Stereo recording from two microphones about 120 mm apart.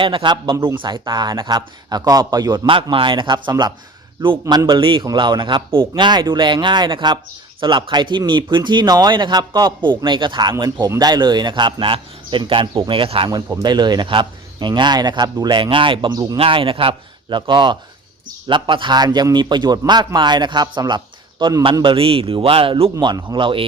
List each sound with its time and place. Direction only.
0.0 s a man's voice: 45° right (ahead or behind)
2.9 s a man's voice: 45° right (ahead or behind)
13.6 s a man's voice: 35° right (ahead or behind)